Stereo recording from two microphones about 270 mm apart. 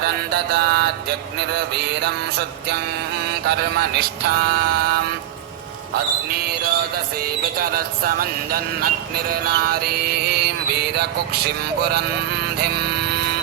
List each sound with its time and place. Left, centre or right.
0.0 s music: right
3.4 s music: right
6.3 s music: right
12.5 s a sound: right